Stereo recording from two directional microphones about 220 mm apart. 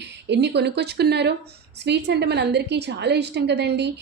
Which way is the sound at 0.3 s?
50° right (ahead or behind).